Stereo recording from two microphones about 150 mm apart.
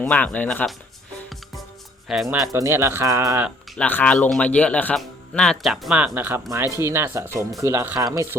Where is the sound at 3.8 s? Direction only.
10° left (ahead or behind).